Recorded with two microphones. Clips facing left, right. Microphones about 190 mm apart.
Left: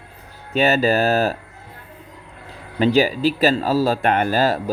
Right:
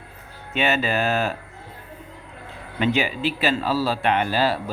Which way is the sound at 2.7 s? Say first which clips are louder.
Left 6 dB; 35° left (ahead or behind).